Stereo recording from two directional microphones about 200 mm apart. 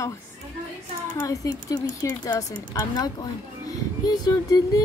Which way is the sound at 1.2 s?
15° left (ahead or behind).